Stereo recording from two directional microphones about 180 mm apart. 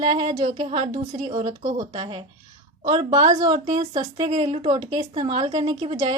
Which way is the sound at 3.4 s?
25° right (ahead or behind).